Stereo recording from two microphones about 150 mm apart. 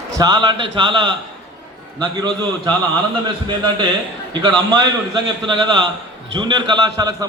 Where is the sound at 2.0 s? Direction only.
30° right (ahead or behind).